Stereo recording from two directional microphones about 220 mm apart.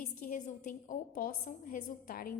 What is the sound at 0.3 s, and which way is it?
A woman's voice, 35° left (ahead or behind).